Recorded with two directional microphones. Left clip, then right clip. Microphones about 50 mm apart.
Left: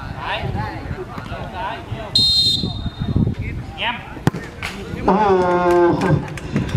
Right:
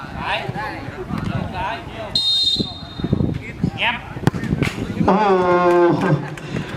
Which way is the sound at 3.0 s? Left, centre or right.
Right.